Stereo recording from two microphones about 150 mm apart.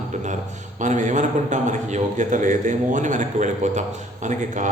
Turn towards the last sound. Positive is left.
turn(degrees=-55)  # may be behind; listen again after turning